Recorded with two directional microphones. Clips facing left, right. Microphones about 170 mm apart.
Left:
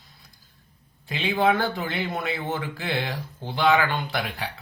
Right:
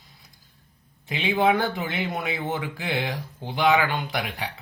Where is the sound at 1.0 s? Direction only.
15° right (ahead or behind).